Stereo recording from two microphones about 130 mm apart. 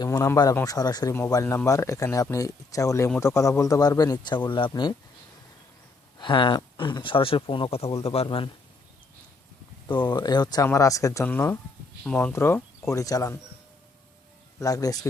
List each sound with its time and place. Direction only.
0.0 s speech: 30° left (ahead or behind)
6.1 s speech: 35° left (ahead or behind)
9.9 s speech: 35° left (ahead or behind)
11.3 s speech: 15° left (ahead or behind)
14.6 s speech: 30° left (ahead or behind)